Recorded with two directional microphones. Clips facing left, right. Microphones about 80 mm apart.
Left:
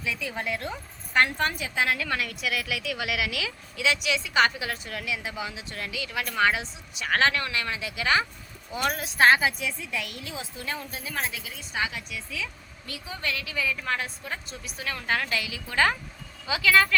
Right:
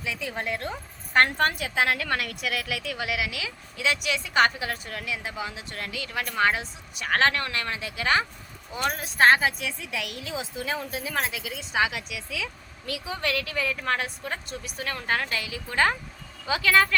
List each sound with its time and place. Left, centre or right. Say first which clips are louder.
0.0 s a woman's voice: even; right
1.1 s a woman's voice: right 2 dB; right
3.1 s a woman's voice: left 1 dB; right
3.8 s a woman's voice: left 1 dB; right
9.6 s a woman's voice: even; right
10.6 s a woman's voice: right 4 dB; right
14.9 s a woman's voice: even; right
15.7 s a woman's voice: even; right
16.5 s a woman's voice: even; right